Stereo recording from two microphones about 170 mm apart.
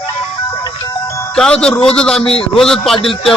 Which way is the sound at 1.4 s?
5° left (ahead or behind).